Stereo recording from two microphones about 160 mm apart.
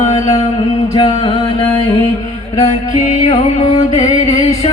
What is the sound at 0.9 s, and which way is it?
Music, 30° left (ahead or behind).